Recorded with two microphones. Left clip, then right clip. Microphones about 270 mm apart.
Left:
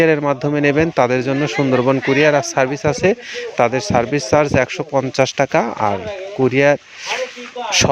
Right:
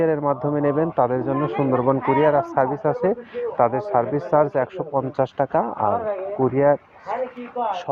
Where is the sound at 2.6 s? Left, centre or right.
Left.